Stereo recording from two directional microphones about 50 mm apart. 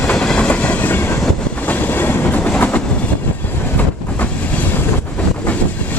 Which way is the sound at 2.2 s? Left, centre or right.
Left.